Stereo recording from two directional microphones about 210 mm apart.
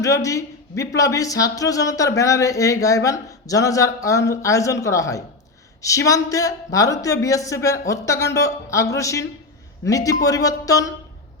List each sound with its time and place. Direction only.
0.0 s speech: 15° left (ahead or behind)